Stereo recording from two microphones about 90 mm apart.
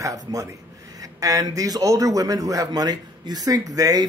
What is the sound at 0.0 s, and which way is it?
A man's voice, 40° right (ahead or behind).